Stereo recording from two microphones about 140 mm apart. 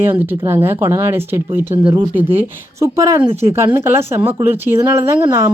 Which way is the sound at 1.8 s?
40° right (ahead or behind).